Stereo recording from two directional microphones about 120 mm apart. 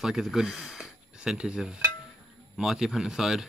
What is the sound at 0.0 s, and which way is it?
Speech, 5° right (ahead or behind).